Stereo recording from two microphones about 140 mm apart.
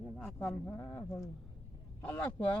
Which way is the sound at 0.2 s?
15° left (ahead or behind).